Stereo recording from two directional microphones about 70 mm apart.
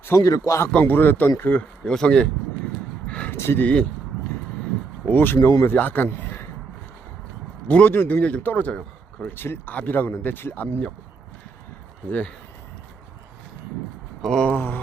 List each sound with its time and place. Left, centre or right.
0.2 s speech: left
0.7 s speech: left
1.8 s speech: centre
3.1 s a sound: centre
3.3 s speech: left
3.6 s speech: centre
5.0 s speech: left
5.4 s speech: left
5.6 s speech: left
7.7 s speech: left
12.0 s speech: left
14.2 s speech: centre
14.5 s speech: left